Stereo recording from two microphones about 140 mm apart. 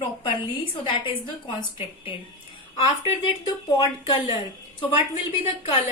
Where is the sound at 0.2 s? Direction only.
40° left (ahead or behind).